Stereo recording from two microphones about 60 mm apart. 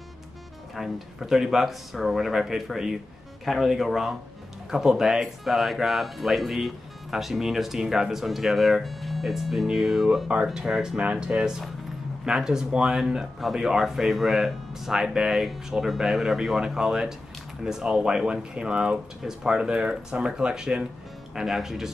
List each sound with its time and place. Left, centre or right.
0.7 s speech: centre
10.2 s speech: centre
11.0 s speech: right